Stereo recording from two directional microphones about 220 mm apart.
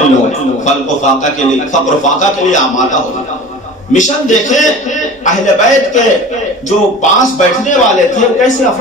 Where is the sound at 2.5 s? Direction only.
35° left (ahead or behind).